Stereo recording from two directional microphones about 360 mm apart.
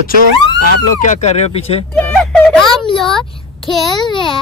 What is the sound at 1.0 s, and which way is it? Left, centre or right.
Speech, centre.